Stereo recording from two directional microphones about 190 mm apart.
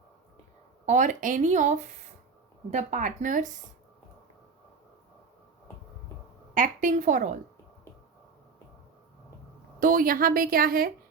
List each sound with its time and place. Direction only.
0.9 s speech: 40° right (ahead or behind)
6.5 s a woman's voice: 40° right (ahead or behind)
9.8 s a woman's voice: 45° right (ahead or behind)